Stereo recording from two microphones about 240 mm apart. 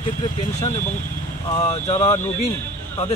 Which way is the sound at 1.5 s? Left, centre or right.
Left.